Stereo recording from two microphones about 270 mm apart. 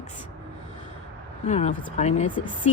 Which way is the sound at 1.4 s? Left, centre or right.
Left.